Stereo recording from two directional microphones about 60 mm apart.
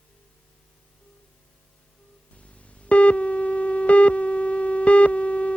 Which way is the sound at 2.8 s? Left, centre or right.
Left.